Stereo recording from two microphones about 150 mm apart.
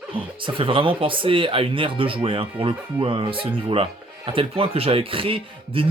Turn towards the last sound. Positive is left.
turn(degrees=-35)  # may be behind; listen again after turning